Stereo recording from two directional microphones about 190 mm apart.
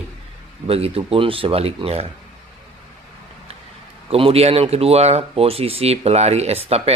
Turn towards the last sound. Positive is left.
turn(degrees=-30)  # may be behind; listen again after turning